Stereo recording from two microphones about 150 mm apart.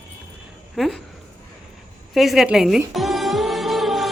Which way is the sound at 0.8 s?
Centre (ahead or behind).